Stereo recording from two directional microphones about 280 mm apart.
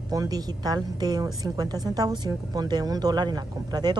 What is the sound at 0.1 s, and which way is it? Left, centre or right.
Speech, centre.